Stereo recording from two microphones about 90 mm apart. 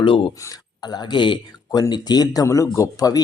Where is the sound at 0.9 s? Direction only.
55° left (ahead or behind).